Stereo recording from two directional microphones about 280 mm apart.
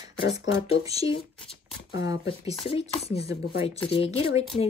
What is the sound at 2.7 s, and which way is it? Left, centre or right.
Speech, left.